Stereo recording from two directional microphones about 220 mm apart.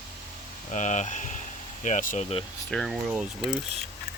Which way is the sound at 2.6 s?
Centre (ahead or behind).